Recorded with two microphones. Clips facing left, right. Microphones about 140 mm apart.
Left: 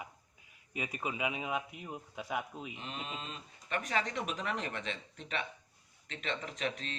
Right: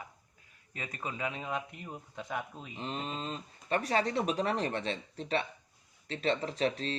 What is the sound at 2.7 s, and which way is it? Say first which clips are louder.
Speech: right 9 dB; 35° right (ahead or behind).